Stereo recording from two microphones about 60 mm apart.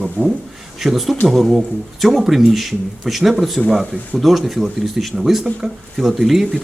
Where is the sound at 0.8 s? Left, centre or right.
Centre.